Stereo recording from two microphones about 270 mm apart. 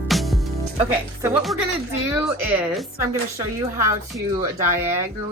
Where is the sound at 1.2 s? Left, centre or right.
Centre.